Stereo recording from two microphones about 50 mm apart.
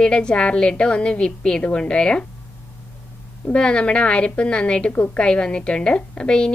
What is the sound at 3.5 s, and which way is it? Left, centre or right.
A woman's voice, left.